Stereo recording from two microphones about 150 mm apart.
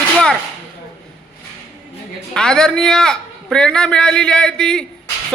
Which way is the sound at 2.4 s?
5° left (ahead or behind).